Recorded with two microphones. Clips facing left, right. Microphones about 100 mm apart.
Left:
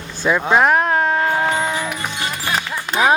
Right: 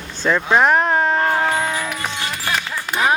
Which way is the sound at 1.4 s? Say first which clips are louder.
Left 1 dB; 20° left (ahead or behind).